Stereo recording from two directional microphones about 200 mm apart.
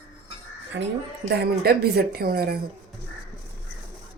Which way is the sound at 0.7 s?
60° right (ahead or behind).